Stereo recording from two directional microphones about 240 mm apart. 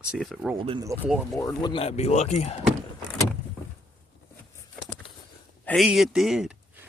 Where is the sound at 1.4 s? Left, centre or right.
Centre.